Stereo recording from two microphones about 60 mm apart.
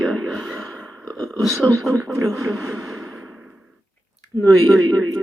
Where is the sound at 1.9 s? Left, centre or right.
Right.